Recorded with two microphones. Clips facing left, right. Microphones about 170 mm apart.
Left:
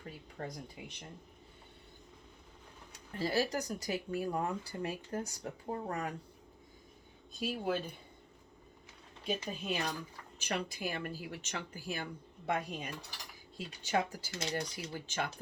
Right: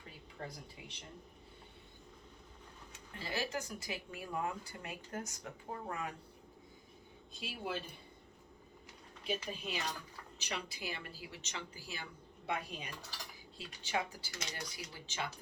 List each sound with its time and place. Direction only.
0.3 s speech: 45° left (ahead or behind)
3.2 s speech: 40° left (ahead or behind)
7.3 s speech: 45° left (ahead or behind)
9.2 s speech: 50° left (ahead or behind)